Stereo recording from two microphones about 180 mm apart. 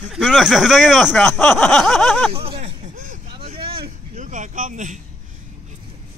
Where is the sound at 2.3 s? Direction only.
30° right (ahead or behind).